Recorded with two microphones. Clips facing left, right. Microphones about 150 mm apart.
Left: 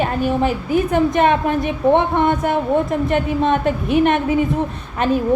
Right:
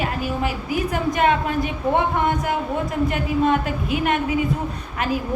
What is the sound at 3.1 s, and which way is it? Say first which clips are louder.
Speech: left 3 dB; 25° left (ahead or behind).